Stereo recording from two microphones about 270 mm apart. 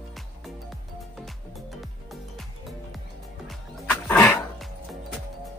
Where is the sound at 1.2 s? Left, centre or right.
Centre.